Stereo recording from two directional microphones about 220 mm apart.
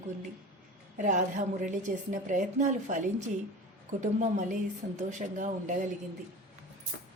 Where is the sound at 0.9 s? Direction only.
35° right (ahead or behind).